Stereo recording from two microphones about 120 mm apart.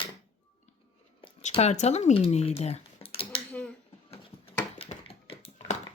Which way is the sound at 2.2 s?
60° left (ahead or behind).